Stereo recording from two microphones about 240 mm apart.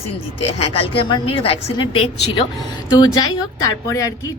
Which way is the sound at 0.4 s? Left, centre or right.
Left.